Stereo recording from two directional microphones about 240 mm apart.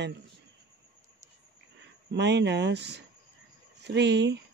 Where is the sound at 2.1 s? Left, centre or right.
Right.